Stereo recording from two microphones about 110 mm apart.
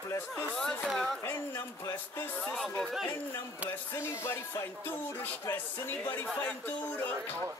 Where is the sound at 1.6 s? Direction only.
20° left (ahead or behind); by 3.0 s centre (ahead or behind).